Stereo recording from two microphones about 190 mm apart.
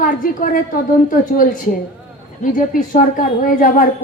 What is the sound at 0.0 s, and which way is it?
Speech, 45° left (ahead or behind).